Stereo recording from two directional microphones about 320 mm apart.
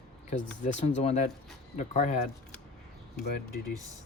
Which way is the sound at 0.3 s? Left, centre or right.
Left.